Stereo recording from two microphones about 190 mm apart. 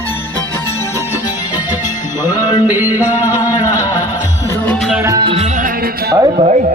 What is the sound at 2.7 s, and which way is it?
Music, 10° right (ahead or behind).